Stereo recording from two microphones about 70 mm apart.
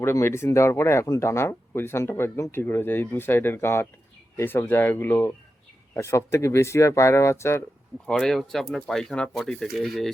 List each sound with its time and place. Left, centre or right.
0.0 s speech: left
8.0 s speech: centre